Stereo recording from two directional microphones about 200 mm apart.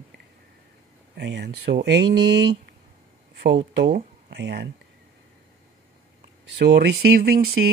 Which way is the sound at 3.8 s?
55° right (ahead or behind).